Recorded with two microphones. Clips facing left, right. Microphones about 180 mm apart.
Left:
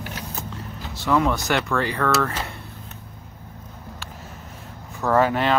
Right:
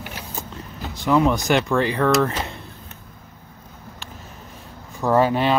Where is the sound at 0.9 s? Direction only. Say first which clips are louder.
Right 3 dB; 15° right (ahead or behind).